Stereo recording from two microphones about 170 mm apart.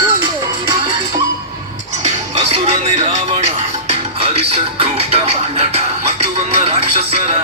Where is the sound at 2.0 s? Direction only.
35° right (ahead or behind).